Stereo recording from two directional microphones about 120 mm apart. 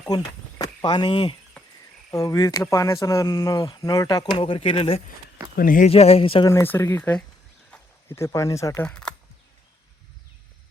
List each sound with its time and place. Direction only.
0.6 s speech: 40° left (ahead or behind)
2.0 s speech: 30° left (ahead or behind); by 6.4 s 55° left (ahead or behind)
6.5 s speech: 20° left (ahead or behind)
7.7 s a sound: 10° left (ahead or behind)
8.1 s speech: 25° left (ahead or behind)
8.8 s speech: 10° left (ahead or behind)